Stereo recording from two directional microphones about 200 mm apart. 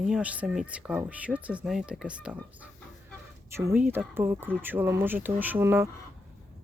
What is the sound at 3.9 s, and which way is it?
Speech, 10° right (ahead or behind).